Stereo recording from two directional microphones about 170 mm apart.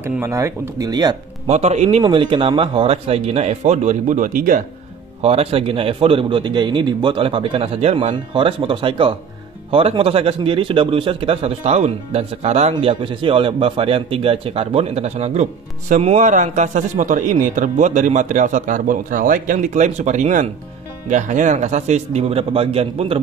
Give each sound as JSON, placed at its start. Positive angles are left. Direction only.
{"t": 0.0, "sound": "speech", "side_deg": -15}
{"t": 1.5, "sound": "a man's voice", "side_deg": -40}
{"t": 5.2, "sound": "a man's voice", "side_deg": -35}